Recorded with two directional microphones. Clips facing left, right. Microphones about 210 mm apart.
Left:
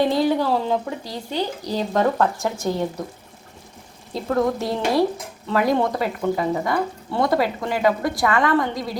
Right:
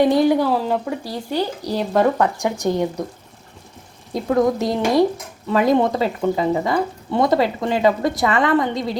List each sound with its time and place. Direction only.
0.0 s a woman's voice: 15° right (ahead or behind)
4.1 s a woman's voice: 15° right (ahead or behind)